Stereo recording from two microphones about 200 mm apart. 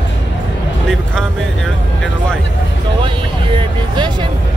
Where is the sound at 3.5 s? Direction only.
25° right (ahead or behind).